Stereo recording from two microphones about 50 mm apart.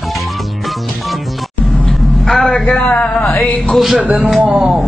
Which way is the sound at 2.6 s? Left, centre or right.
Left.